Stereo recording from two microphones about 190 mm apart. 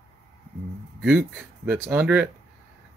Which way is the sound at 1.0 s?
10° right (ahead or behind).